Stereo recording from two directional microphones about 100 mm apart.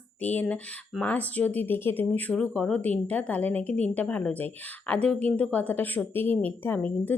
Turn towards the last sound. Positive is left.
turn(degrees=15)  # may be behind; listen again after turning